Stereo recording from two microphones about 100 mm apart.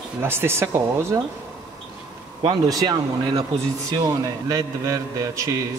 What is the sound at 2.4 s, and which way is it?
A man's voice, 40° right (ahead or behind).